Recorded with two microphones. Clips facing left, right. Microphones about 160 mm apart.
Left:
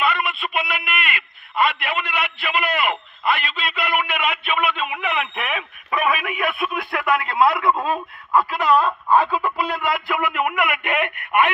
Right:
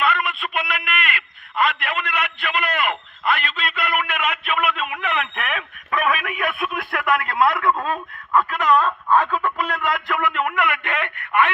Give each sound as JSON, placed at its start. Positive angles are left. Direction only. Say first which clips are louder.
{"t": 0.0, "sound": "a man's voice", "louder": "even", "side_deg": 0}